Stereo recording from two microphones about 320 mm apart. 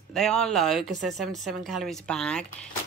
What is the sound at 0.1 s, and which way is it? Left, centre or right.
Speech, centre.